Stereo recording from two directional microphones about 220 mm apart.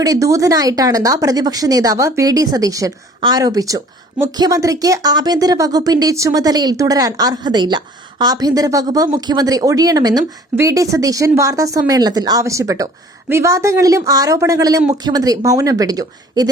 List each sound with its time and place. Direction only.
0.0 s speech: 15° right (ahead or behind)